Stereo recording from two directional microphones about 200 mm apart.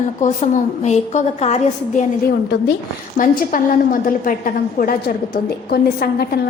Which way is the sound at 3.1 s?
40° left (ahead or behind).